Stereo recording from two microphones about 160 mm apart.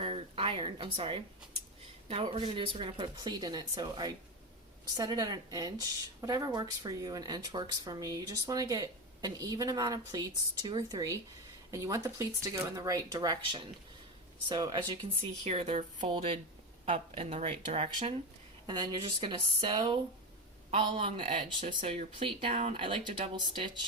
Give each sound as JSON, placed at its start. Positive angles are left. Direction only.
{"t": 0.0, "sound": "a sound", "side_deg": -35}
{"t": 2.0, "sound": "speech", "side_deg": -35}
{"t": 18.6, "sound": "speech", "side_deg": -30}